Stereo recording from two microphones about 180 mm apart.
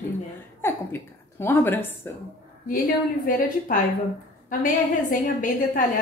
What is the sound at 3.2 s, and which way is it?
A woman's voice, 50° left (ahead or behind).